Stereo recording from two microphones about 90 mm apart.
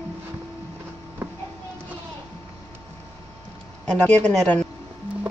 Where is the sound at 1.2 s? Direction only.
20° right (ahead or behind).